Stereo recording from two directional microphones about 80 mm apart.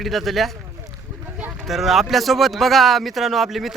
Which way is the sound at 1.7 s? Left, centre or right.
Centre.